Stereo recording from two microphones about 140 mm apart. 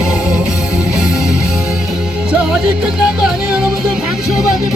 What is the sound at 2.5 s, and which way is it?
Music, 5° right (ahead or behind).